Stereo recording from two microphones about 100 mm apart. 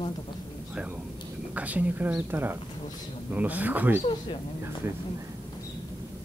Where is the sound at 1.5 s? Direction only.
15° right (ahead or behind).